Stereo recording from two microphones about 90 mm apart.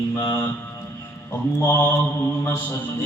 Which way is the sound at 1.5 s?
30° left (ahead or behind).